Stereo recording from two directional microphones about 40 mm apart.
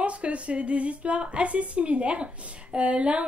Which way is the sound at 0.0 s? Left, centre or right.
Right.